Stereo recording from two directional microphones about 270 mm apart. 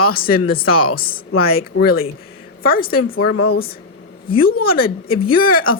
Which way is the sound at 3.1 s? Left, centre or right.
Left.